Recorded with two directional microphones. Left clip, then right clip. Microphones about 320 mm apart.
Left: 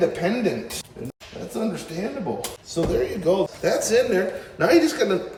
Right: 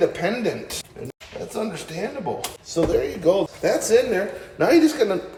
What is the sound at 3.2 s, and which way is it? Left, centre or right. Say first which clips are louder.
A man's voice: right 2 dB; right.